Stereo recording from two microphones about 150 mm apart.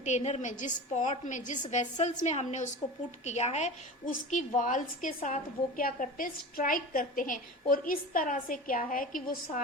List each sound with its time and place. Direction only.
0.0 s a woman's voice: 50° left (ahead or behind)
4.0 s a woman's voice: 60° left (ahead or behind)